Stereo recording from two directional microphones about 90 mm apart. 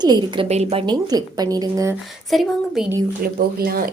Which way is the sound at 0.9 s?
50° right (ahead or behind).